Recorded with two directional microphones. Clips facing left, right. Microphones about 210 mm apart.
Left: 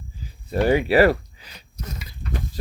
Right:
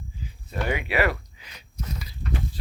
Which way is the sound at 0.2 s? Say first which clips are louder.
Left 9 dB; 35° left (ahead or behind).